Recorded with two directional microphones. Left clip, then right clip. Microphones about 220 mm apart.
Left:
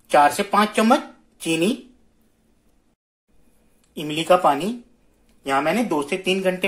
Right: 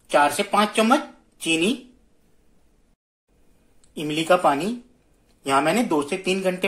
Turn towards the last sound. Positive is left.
turn(degrees=0)  # may be behind; listen again after turning